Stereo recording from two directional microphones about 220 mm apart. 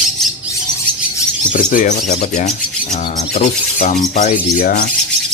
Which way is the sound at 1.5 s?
35° left (ahead or behind).